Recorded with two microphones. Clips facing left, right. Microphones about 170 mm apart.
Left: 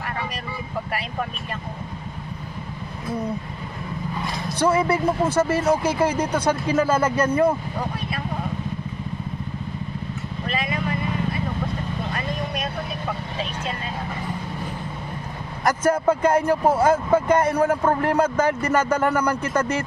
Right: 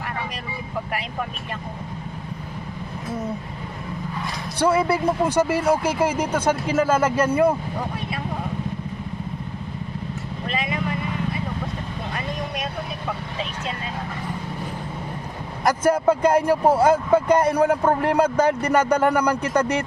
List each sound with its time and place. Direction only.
4.6 s speech: 10° right (ahead or behind)
10.4 s vehicle: 20° right (ahead or behind)
15.6 s speech: 10° right (ahead or behind)